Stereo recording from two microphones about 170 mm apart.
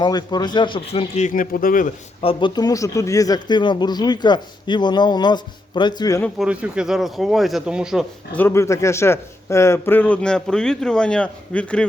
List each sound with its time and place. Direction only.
0.0 s speech: 25° left (ahead or behind); by 1.9 s 55° left (ahead or behind)
2.2 s speech: 25° left (ahead or behind)
6.4 s speech: 5° right (ahead or behind)
8.4 s a man's voice: 15° left (ahead or behind)